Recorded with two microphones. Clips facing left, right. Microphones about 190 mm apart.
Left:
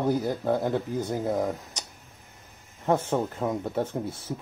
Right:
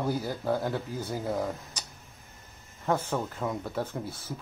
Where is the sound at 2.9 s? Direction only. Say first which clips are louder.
Left 4 dB; 20° left (ahead or behind).